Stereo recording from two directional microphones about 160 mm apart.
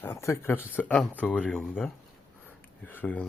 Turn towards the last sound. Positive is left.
turn(degrees=10)  # may be behind; listen again after turning